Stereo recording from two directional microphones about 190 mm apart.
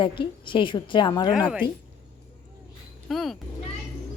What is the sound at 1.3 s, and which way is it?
Speech, 5° right (ahead or behind).